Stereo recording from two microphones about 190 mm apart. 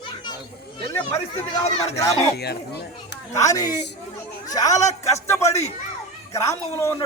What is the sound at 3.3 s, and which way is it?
A woman's voice, 20° left (ahead or behind).